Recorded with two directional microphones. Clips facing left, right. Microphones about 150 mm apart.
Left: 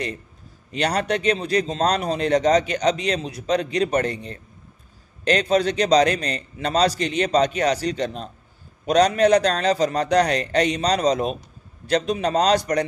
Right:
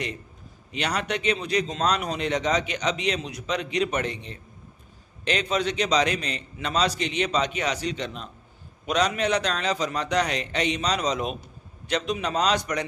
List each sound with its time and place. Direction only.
0.7 s a man's voice: 40° left (ahead or behind)